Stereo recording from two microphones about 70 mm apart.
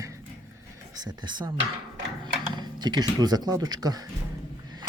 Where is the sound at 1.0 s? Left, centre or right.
Right.